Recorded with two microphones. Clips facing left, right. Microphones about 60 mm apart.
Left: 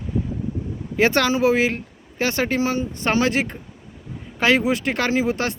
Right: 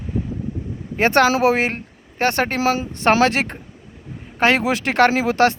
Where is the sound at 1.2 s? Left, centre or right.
Right.